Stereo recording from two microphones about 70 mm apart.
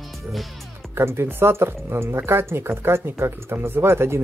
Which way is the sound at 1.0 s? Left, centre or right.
Right.